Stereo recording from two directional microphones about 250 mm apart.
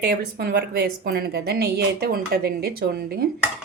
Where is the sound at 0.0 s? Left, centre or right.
Right.